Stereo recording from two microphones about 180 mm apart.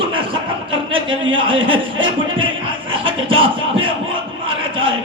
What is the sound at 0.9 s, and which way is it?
Speech, 30° right (ahead or behind).